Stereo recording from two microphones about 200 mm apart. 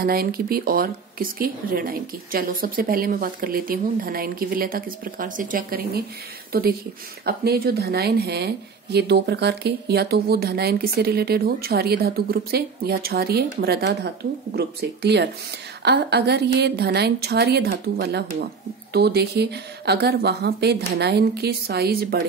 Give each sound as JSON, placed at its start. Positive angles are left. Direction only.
{"t": 0.0, "sound": "a woman's voice", "side_deg": -50}
{"t": 7.2, "sound": "a woman's voice", "side_deg": -50}